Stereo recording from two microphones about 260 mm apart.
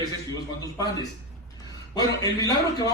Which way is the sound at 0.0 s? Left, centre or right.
Centre.